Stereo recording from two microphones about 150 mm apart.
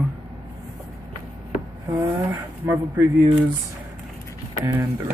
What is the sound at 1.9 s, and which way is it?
Speech, 30° right (ahead or behind).